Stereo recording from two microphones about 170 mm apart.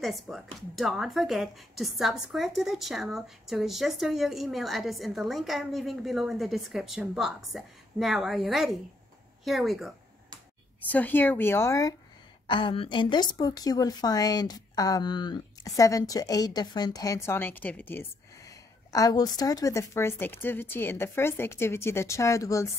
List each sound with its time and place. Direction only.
0.0 s speech: centre (ahead or behind)
10.8 s speech: 10° left (ahead or behind)
12.4 s a woman's voice: 30° left (ahead or behind)